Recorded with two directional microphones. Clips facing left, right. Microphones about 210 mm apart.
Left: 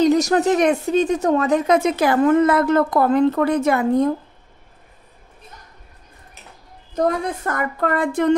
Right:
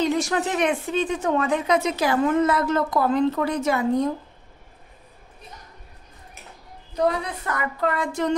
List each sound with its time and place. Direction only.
0.0 s speech: 40° left (ahead or behind)
7.0 s speech: 45° left (ahead or behind)